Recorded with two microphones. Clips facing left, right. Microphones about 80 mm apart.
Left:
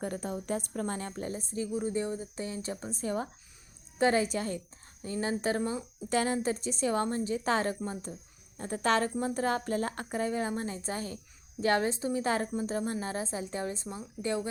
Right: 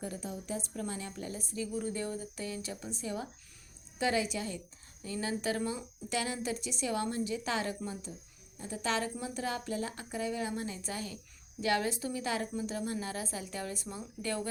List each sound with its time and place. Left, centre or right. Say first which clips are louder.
0.0 s a woman's voice: left 5 dB; left
1.7 s a woman's voice: left 5 dB; left
5.0 s a woman's voice: left 3 dB; left